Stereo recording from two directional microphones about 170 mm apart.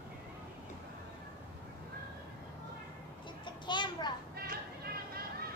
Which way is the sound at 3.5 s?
25° left (ahead or behind).